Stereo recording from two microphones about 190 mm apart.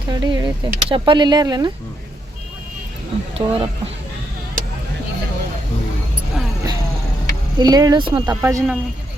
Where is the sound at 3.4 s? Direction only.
30° right (ahead or behind).